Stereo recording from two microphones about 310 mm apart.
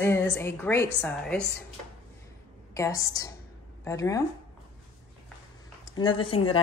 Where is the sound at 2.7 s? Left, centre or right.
Centre.